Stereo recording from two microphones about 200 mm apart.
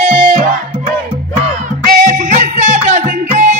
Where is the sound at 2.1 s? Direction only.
40° right (ahead or behind).